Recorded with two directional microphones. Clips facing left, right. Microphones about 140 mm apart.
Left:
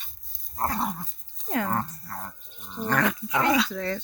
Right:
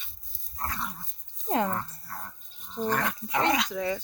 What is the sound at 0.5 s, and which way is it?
Dog, 40° left (ahead or behind).